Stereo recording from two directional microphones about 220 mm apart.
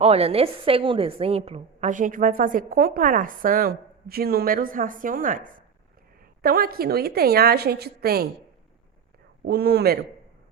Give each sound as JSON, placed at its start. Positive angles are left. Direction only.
{"t": 0.0, "sound": "a woman's voice", "side_deg": -25}
{"t": 9.5, "sound": "a woman's voice", "side_deg": -45}